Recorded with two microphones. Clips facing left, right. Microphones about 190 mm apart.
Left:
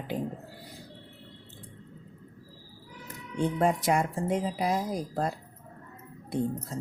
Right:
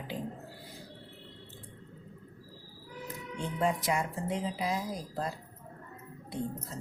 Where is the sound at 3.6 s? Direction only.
50° left (ahead or behind).